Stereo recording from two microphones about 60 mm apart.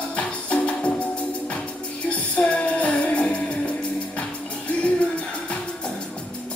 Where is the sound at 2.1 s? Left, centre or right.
Left.